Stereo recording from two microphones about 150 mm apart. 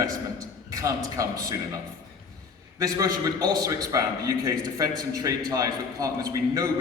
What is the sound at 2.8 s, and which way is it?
A man's voice, 25° right (ahead or behind).